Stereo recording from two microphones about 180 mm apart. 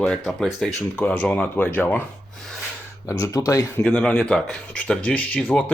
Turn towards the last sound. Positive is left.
turn(degrees=5)  # may be behind; listen again after turning